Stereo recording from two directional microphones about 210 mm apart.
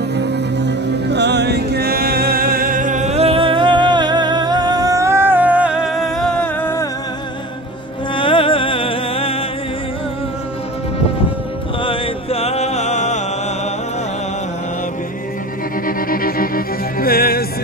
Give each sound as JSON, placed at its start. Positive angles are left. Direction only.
{"t": 0.1, "sound": "music", "side_deg": -55}
{"t": 8.1, "sound": "music", "side_deg": 25}
{"t": 11.8, "sound": "music", "side_deg": 25}
{"t": 16.1, "sound": "music", "side_deg": 45}